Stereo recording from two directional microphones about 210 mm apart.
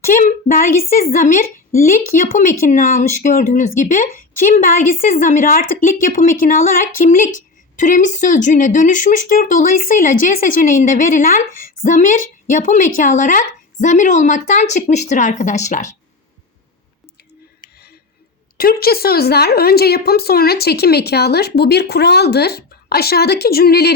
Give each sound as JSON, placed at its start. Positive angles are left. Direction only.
{"t": 0.0, "sound": "speech", "side_deg": 35}
{"t": 18.5, "sound": "a woman's voice", "side_deg": 45}